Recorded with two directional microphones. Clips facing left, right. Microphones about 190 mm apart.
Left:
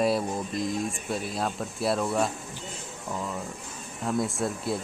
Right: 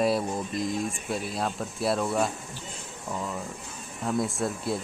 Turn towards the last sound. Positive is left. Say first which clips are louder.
# even
turn(degrees=0)  # may be behind; listen again after turning